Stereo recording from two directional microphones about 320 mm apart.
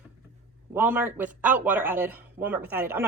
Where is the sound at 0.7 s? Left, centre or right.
Centre.